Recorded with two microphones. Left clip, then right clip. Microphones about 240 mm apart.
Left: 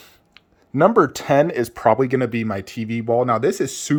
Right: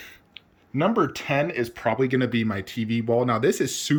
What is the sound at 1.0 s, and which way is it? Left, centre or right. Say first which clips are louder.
Speech: left 7 dB; left.